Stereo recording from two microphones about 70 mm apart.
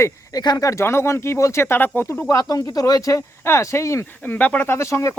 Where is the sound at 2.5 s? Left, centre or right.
Left.